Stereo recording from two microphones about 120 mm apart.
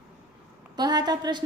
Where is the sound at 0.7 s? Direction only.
35° right (ahead or behind).